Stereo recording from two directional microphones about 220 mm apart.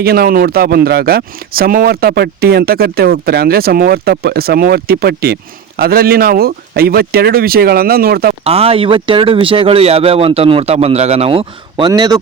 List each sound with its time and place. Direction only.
0.0 s speech: 45° right (ahead or behind)
8.4 s speech: 25° right (ahead or behind)